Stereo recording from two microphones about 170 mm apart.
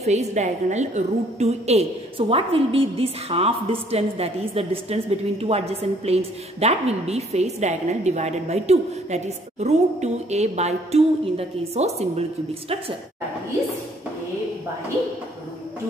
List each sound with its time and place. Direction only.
0.0 s a woman's voice: 40° right (ahead or behind)